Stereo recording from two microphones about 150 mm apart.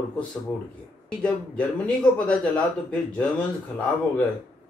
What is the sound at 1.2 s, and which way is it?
Speech, 5° left (ahead or behind).